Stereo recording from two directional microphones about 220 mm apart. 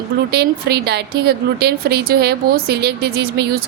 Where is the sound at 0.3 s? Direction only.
50° right (ahead or behind).